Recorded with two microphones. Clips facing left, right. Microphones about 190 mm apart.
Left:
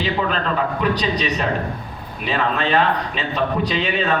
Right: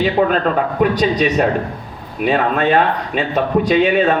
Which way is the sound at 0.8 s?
50° right (ahead or behind).